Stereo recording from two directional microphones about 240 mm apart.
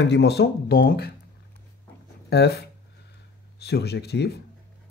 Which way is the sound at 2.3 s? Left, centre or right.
Left.